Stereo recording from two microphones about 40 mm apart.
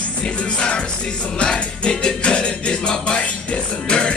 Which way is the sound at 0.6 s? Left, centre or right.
Left.